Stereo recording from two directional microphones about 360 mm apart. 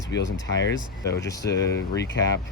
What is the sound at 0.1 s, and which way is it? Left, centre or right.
Speech, left.